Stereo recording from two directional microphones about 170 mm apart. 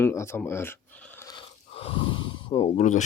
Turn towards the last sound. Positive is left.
turn(degrees=45)  # may be behind; listen again after turning